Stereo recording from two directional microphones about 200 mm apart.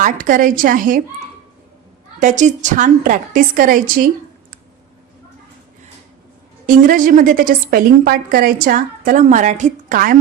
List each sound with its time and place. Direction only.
0.0 s a woman's voice: 40° right (ahead or behind)
2.1 s a woman's voice: 35° right (ahead or behind)
6.7 s a woman's voice: 45° right (ahead or behind)